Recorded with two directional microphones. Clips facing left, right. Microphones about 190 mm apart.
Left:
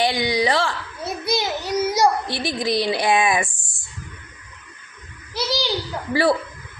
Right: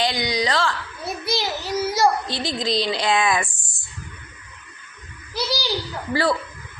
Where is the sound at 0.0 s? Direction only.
25° left (ahead or behind).